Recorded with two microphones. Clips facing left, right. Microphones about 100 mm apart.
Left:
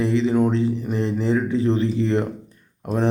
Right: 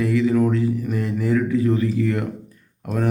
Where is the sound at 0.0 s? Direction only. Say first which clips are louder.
Even; 25° left (ahead or behind).